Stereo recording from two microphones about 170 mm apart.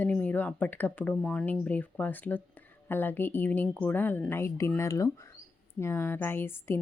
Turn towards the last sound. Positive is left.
turn(degrees=15)  # may be behind; listen again after turning